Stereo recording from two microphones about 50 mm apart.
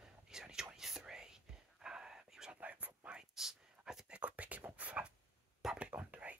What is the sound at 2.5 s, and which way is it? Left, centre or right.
Whispering, right.